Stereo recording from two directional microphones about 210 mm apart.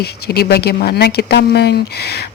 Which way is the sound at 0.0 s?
50° left (ahead or behind).